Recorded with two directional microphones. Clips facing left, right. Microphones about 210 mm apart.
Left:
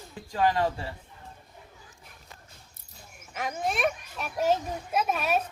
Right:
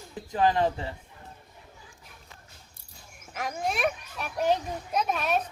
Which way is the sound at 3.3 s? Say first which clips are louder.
Even; centre (ahead or behind).